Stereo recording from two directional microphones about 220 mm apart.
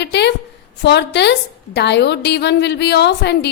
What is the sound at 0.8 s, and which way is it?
A woman's voice, 50° left (ahead or behind).